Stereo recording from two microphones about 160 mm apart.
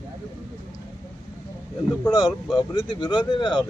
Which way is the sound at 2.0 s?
25° left (ahead or behind).